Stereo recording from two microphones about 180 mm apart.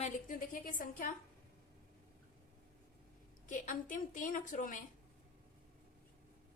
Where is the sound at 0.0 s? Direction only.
50° left (ahead or behind).